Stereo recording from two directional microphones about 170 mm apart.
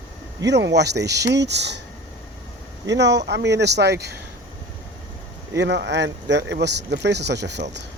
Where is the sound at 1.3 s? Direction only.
90° right.